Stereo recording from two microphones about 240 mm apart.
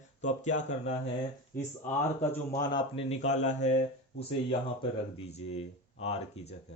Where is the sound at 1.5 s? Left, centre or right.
Centre; by 3.7 s left.